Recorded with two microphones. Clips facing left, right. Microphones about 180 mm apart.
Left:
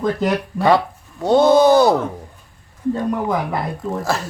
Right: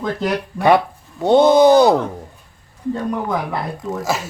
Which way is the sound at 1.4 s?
20° right (ahead or behind).